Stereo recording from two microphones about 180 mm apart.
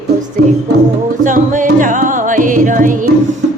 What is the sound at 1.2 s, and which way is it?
Music, 45° right (ahead or behind).